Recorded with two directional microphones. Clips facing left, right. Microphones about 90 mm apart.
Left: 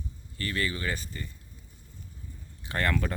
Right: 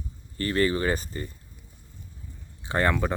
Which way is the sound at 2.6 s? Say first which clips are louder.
Right 5 dB; 25° right (ahead or behind).